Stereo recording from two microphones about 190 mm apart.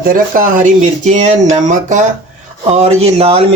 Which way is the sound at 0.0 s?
45° right (ahead or behind).